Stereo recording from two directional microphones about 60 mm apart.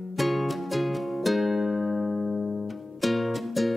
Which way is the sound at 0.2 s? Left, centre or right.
Centre.